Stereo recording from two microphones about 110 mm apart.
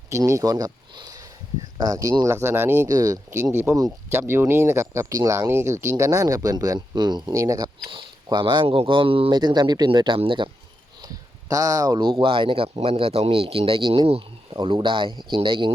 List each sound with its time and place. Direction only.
0.1 s speech: 30° right (ahead or behind)
2.9 s speech: 35° right (ahead or behind)
7.9 s speech: 50° right (ahead or behind)
9.3 s speech: 40° right (ahead or behind)
11.0 s a sound: 30° right (ahead or behind)
12.0 s speech: 55° right (ahead or behind)